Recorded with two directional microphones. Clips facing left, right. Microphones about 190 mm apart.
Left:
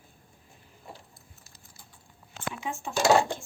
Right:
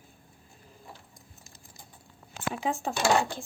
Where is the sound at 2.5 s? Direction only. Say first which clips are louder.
Right 5 dB; 35° right (ahead or behind).